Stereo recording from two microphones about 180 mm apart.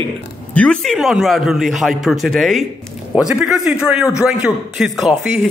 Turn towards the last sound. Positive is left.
turn(degrees=0)  # may be behind; listen again after turning